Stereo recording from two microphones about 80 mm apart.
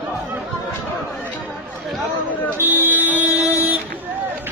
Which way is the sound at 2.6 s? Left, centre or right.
Right.